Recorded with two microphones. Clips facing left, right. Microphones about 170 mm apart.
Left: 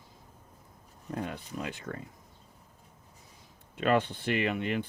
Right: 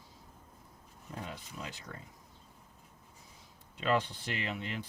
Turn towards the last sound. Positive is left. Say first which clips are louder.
# left 9 dB
turn(degrees=60)  # may be behind; listen again after turning